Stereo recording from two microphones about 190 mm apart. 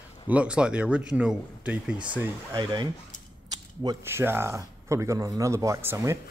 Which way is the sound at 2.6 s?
25° right (ahead or behind).